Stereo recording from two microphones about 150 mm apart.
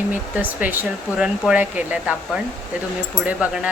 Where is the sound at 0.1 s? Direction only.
10° right (ahead or behind).